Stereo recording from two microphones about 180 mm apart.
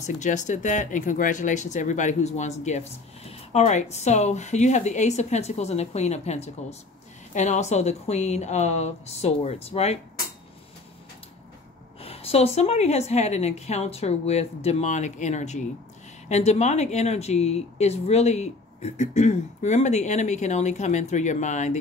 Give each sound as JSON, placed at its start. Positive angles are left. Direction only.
{"t": 0.0, "sound": "speech", "side_deg": 40}
{"t": 12.0, "sound": "speech", "side_deg": 35}